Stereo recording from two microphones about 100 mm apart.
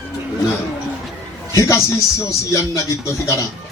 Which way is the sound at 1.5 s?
30° left (ahead or behind).